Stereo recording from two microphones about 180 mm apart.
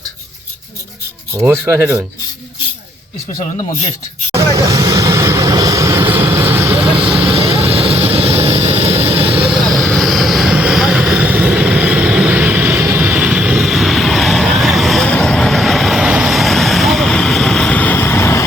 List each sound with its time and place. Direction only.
1.4 s speech: 15° right (ahead or behind)
4.3 s vehicle: 15° right (ahead or behind)
6.8 s vehicle: 30° right (ahead or behind)
9.4 s vehicle: centre (ahead or behind); by 18.4 s 15° left (ahead or behind)